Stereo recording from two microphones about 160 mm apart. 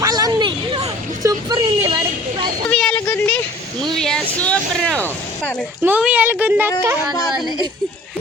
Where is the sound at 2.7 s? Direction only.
5° left (ahead or behind).